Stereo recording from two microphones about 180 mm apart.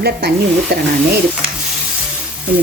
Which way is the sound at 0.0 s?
60° right (ahead or behind).